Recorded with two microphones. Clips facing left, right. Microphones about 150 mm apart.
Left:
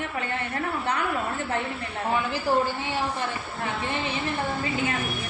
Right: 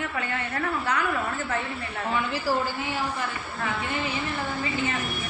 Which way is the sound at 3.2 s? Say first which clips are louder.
Left 1 dB; 30° left (ahead or behind).